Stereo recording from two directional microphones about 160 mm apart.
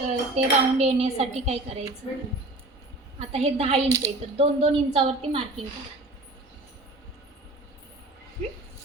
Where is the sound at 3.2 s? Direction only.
40° right (ahead or behind).